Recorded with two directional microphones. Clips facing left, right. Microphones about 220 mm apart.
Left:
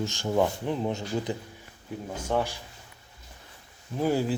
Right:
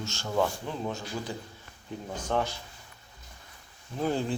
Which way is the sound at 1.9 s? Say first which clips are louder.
Left 2 dB; 5° left (ahead or behind).